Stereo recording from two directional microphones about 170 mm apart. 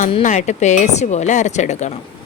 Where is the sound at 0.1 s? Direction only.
45° left (ahead or behind).